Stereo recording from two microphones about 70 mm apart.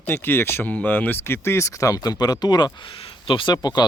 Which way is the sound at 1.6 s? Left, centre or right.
Left.